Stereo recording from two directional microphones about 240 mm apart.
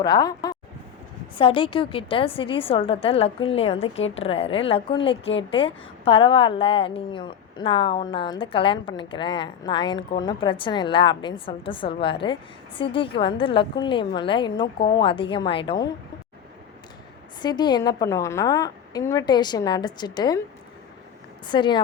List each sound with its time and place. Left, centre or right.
0.0 s a woman's voice: centre
14.8 s a woman's voice: left
15.0 s a woman's voice: left
17.4 s a woman's voice: centre
21.4 s a woman's voice: centre